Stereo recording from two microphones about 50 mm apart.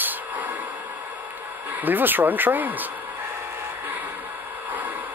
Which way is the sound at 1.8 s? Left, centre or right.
Right.